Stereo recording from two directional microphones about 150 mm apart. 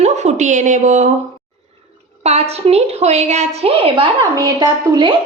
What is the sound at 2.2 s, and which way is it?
A woman's voice, 45° right (ahead or behind).